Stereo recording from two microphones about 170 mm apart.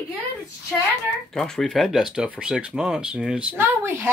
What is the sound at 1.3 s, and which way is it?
Speech, 5° left (ahead or behind).